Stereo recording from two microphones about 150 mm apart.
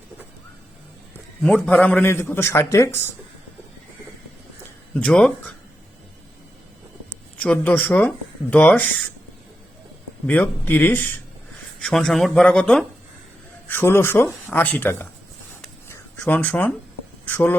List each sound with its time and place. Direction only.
1.4 s a man's voice: 5° left (ahead or behind)
4.9 s a man's voice: 5° left (ahead or behind)
7.4 s a man's voice: 10° left (ahead or behind)
10.2 s a man's voice: 10° left (ahead or behind)
15.9 s a sound: 10° left (ahead or behind)
17.2 s speech: 10° left (ahead or behind)